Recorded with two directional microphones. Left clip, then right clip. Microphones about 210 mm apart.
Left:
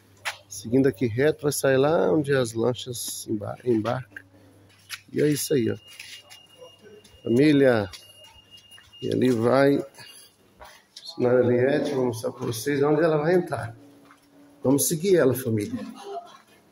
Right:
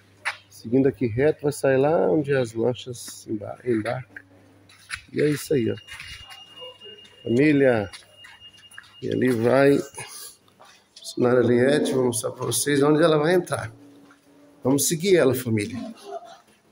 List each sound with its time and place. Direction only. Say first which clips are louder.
0.7 s speech: right 1 dB; 20° right (ahead or behind)
4.8 s a sound: right 1 dB; centre (ahead or behind)
5.3 s speech: right 1 dB; 15° right (ahead or behind)
7.5 s speech: even; centre (ahead or behind)
9.0 s speech: right 1 dB; 5° right (ahead or behind)
11.1 s speech: right 1 dB; 40° right (ahead or behind)
14.6 s speech: even; 15° right (ahead or behind)